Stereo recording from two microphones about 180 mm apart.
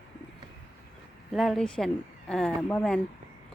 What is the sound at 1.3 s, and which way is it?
A woman's voice, centre (ahead or behind).